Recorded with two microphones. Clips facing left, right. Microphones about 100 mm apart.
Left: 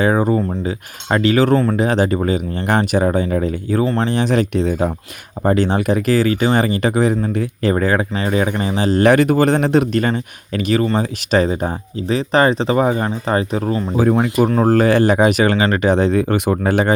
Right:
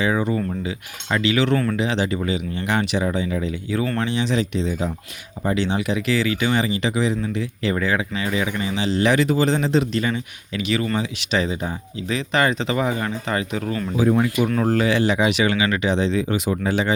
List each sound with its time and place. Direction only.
0.0 s speech: 45° left (ahead or behind)